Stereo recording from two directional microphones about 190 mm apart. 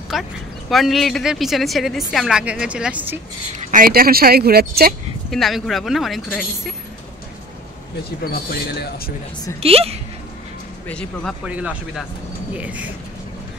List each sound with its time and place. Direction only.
0.1 s a woman's voice: centre (ahead or behind)
3.5 s speech: 45° right (ahead or behind)
5.3 s a woman's voice: centre (ahead or behind)
8.2 s speech: 55° left (ahead or behind)
9.6 s speech: 30° right (ahead or behind)
10.9 s a woman's voice: 5° left (ahead or behind)
11.4 s speech: 5° right (ahead or behind)